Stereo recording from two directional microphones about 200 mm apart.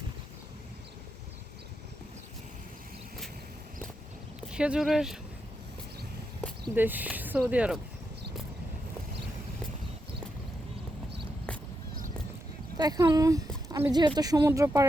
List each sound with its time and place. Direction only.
4.5 s speech: 5° right (ahead or behind)
6.7 s speech: 10° right (ahead or behind)
12.7 s speech: 20° right (ahead or behind)